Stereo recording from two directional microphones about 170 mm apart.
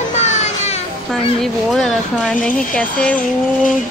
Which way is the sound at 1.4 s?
Centre (ahead or behind).